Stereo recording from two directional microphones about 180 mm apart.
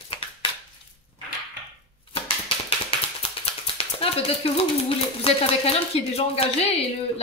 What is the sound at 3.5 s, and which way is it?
Speech, 30° left (ahead or behind).